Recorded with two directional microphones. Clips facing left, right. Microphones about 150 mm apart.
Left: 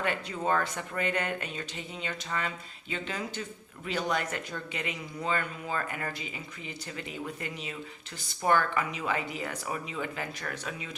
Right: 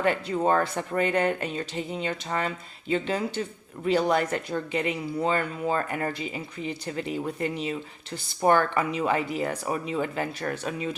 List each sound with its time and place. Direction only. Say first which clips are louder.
0.0 s speech: right 7 dB; 35° right (ahead or behind)